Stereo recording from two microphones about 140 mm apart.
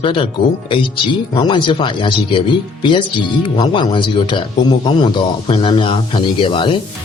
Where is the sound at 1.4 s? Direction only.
35° left (ahead or behind).